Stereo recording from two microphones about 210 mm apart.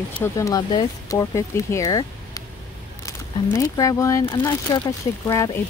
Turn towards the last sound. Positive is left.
turn(degrees=20)  # may be behind; listen again after turning